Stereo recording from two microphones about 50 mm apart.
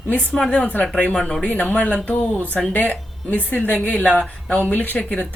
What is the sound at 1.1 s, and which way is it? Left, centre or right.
Speech, centre.